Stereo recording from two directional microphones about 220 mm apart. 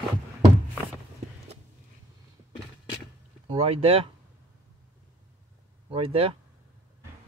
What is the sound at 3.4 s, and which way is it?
Speech, 25° right (ahead or behind).